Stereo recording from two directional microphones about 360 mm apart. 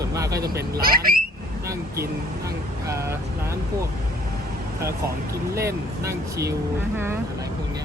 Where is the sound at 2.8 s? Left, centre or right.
Centre.